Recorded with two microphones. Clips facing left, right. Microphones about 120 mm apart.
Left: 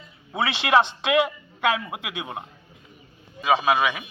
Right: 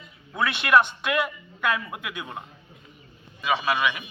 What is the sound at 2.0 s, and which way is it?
Speech, 80° left.